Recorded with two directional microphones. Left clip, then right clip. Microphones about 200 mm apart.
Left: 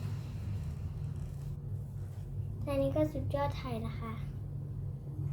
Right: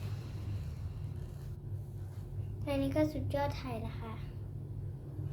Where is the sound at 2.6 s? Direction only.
10° right (ahead or behind).